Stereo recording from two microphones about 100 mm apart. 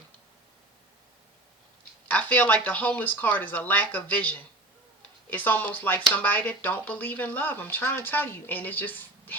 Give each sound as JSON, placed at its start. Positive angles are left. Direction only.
{"t": 2.0, "sound": "speech", "side_deg": 15}